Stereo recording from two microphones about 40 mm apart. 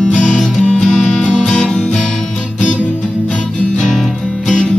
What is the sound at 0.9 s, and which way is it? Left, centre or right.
Music, left.